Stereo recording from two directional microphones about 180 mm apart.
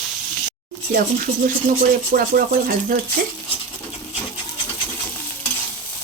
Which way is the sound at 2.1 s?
55° right (ahead or behind).